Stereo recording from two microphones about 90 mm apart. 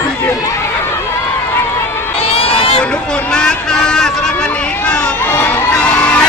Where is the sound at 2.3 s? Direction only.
90° left.